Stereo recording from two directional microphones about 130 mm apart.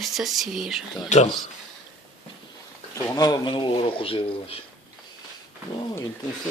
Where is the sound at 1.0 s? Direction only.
60° left (ahead or behind).